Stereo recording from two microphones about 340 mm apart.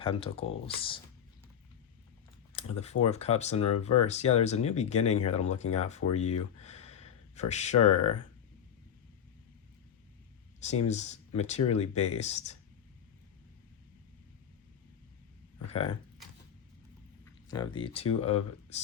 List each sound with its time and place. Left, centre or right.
0.0 s speech: centre
2.5 s speech: centre
10.7 s speech: centre
15.7 s speech: centre
17.5 s speech: centre